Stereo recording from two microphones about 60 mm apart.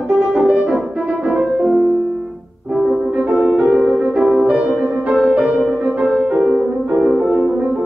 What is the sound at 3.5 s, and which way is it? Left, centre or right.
Music, centre.